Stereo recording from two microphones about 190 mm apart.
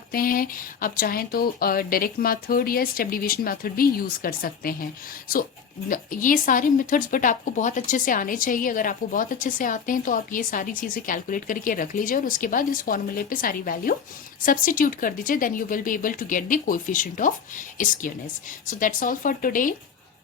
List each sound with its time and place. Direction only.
0.1 s speech: 50° left (ahead or behind)
5.9 s speech: 45° left (ahead or behind)